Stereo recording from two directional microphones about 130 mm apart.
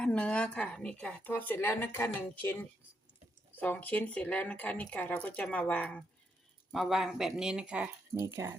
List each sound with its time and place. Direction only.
0.0 s speech: 5° left (ahead or behind)
3.6 s speech: 10° left (ahead or behind)
6.7 s speech: centre (ahead or behind)
8.1 s speech: 20° right (ahead or behind)